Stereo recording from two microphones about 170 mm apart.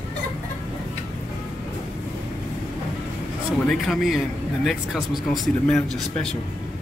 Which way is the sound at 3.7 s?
Centre (ahead or behind).